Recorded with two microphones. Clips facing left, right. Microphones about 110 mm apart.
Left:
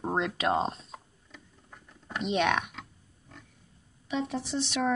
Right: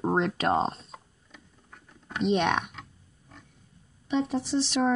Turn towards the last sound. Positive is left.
turn(degrees=0)  # may be behind; listen again after turning